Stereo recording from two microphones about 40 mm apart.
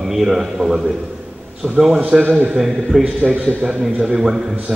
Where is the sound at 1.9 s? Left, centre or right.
Right.